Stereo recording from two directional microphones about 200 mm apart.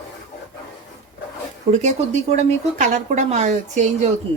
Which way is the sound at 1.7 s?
35° right (ahead or behind).